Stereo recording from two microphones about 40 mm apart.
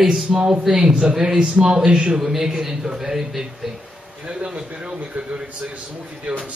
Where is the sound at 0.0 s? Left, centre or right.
Centre.